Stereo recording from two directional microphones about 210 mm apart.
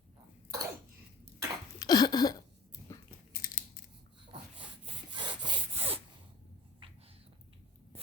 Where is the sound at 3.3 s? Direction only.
45° left (ahead or behind).